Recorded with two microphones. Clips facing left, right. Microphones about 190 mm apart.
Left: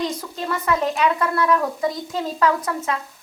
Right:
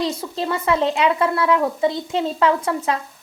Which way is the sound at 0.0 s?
30° right (ahead or behind).